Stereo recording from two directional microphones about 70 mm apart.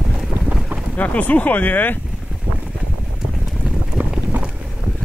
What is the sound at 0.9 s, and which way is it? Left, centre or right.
Speech, left.